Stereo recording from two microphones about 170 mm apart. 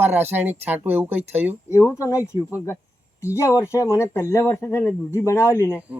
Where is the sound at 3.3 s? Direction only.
15° left (ahead or behind).